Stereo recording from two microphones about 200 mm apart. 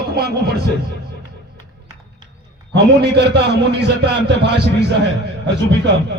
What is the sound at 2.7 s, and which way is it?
A man's voice, 60° right (ahead or behind).